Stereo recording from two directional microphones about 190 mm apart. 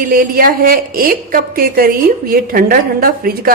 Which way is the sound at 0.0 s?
50° right (ahead or behind).